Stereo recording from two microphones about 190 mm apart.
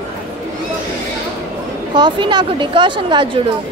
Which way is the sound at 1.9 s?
25° right (ahead or behind).